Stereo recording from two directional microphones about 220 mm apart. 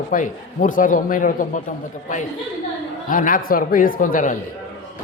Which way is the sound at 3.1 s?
40° left (ahead or behind).